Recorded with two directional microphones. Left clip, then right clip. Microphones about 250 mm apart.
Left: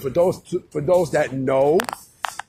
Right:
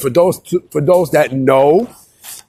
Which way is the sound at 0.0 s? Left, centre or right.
Right.